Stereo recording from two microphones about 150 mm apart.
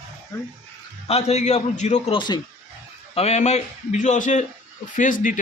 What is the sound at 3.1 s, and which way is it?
A man's voice, 45° left (ahead or behind).